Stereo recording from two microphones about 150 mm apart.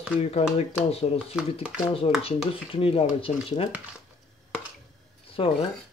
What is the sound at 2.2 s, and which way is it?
Dishes, 40° left (ahead or behind).